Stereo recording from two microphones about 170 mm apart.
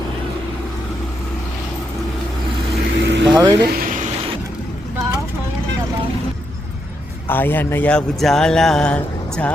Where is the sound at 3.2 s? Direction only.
25° right (ahead or behind).